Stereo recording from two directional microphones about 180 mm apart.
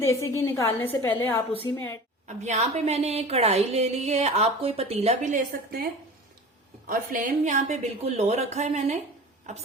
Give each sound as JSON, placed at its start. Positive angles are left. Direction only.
{"t": 0.0, "sound": "a woman's voice", "side_deg": 15}
{"t": 2.2, "sound": "a woman's voice", "side_deg": -40}